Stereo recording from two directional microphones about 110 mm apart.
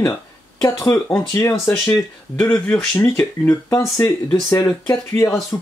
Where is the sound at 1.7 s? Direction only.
15° left (ahead or behind).